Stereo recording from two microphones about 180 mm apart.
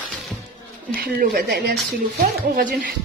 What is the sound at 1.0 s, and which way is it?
Speech, 50° right (ahead or behind).